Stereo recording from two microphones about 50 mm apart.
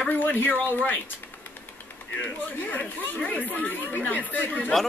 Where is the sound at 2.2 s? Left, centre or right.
Left.